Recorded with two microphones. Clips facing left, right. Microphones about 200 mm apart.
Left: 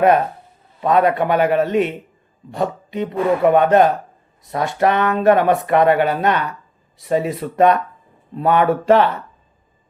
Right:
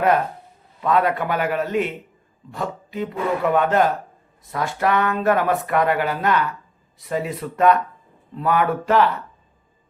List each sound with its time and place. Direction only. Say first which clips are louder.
0.8 s speech: left 4 dB; 25° left (ahead or behind)